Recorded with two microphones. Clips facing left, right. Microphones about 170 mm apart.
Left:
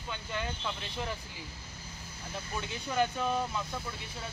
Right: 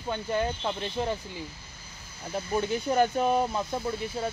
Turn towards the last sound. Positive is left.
turn(degrees=-40)  # may be behind; listen again after turning